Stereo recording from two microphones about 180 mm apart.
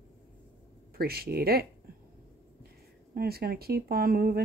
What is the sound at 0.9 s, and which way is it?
Speech, 55° right (ahead or behind).